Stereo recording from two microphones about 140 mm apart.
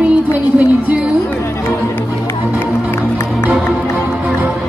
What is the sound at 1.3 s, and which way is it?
Music, 15° left (ahead or behind).